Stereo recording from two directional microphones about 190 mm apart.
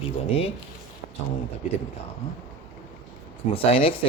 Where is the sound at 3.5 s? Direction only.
30° left (ahead or behind).